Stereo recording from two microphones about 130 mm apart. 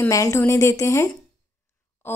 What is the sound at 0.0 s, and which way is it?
Speech, 25° left (ahead or behind).